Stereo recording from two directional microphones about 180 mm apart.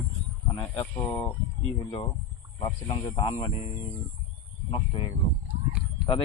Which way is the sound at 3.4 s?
35° left (ahead or behind).